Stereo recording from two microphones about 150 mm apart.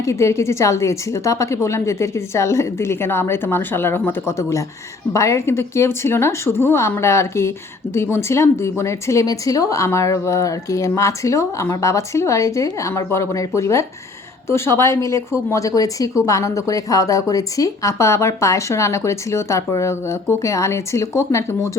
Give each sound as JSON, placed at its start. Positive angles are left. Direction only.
{"t": 0.0, "sound": "a woman's voice", "side_deg": 20}